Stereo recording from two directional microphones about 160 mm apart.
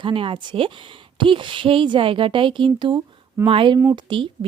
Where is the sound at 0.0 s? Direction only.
35° right (ahead or behind).